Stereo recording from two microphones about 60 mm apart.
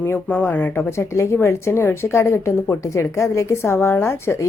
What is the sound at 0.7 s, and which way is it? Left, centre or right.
A woman's voice, left.